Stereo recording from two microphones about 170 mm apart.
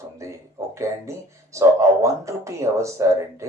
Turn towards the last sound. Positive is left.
turn(degrees=-15)  # may be behind; listen again after turning